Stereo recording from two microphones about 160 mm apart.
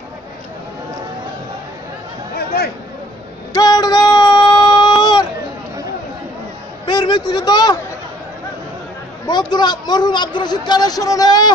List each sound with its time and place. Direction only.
2.3 s a sound: 80° left
3.5 s female singing: 25° left (ahead or behind)
6.9 s a man's voice: 30° left (ahead or behind)
9.2 s a man's voice: 25° left (ahead or behind)